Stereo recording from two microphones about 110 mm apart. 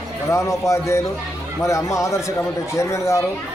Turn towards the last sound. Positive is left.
turn(degrees=25)  # may be behind; listen again after turning